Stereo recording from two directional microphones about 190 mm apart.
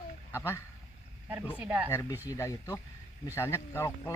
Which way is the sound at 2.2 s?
15° left (ahead or behind).